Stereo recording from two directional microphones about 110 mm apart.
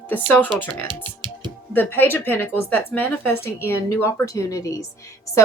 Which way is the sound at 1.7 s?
15° left (ahead or behind).